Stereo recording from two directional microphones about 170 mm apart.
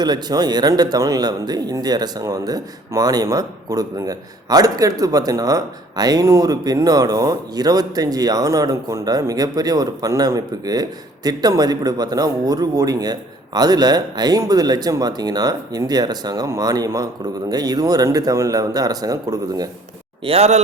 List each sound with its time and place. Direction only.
0.0 s speech: 25° right (ahead or behind)
20.2 s speech: 35° right (ahead or behind)